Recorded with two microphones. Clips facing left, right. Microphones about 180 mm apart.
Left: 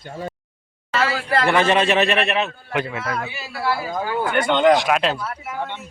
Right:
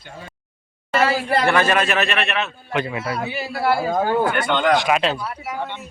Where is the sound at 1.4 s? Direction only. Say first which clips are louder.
Left 3 dB; 20° left (ahead or behind); by 2.5 s 35° left (ahead or behind).